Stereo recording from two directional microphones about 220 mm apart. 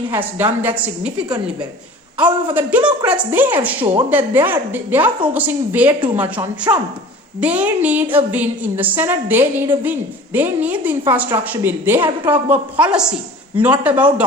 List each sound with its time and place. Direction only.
0.1 s a woman's voice: 10° right (ahead or behind)
2.1 s a woman's voice: 5° right (ahead or behind)